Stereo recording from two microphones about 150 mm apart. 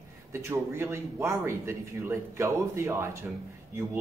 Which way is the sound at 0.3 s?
15° right (ahead or behind).